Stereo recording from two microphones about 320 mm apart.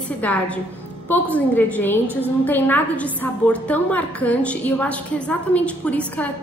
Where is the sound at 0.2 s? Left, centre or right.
Centre.